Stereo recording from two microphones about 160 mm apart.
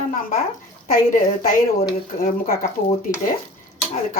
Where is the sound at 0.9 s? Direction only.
60° left (ahead or behind).